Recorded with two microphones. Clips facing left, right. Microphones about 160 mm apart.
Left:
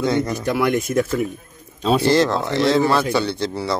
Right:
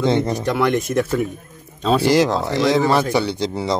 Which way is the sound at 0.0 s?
25° right (ahead or behind).